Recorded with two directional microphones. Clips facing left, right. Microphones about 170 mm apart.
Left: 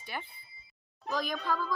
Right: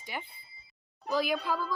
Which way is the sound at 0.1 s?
15° right (ahead or behind).